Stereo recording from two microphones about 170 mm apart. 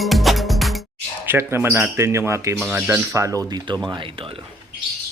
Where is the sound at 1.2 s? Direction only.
15° right (ahead or behind); by 4.3 s 30° right (ahead or behind).